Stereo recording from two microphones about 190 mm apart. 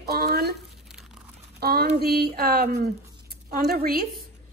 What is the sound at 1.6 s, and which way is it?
A woman's voice, 55° right (ahead or behind).